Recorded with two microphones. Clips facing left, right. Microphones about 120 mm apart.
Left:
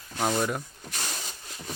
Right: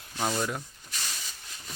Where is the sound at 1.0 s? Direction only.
50° left (ahead or behind).